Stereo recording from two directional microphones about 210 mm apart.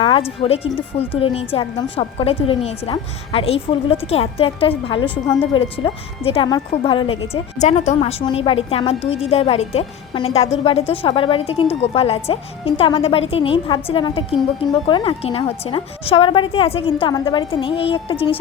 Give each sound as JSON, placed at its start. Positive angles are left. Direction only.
{"t": 0.0, "sound": "music", "side_deg": 25}
{"t": 0.4, "sound": "a woman's voice", "side_deg": 30}